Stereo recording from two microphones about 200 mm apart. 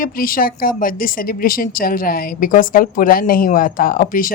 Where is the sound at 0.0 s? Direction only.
45° left (ahead or behind).